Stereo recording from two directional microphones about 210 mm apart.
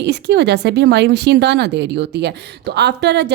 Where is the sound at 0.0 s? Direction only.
55° right (ahead or behind).